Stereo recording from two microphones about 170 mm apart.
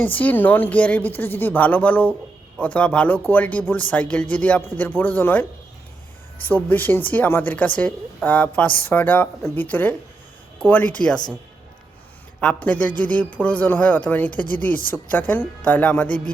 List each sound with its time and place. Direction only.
0.0 s a woman's voice: 10° left (ahead or behind)
6.5 s a woman's voice: 10° left (ahead or behind)
12.4 s a woman's voice: 5° left (ahead or behind)